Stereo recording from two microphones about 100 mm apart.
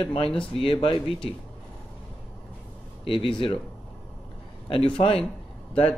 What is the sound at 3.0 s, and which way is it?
Speech, 65° left (ahead or behind).